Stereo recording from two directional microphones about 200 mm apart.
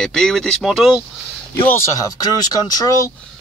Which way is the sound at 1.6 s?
15° left (ahead or behind).